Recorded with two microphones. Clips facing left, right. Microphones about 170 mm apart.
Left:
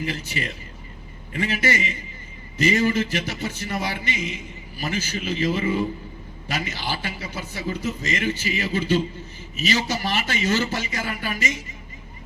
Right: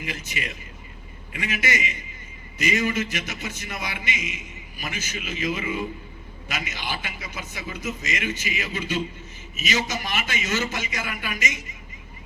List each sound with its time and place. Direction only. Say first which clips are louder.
0.0 s speech: left 5 dB; 35° left (ahead or behind)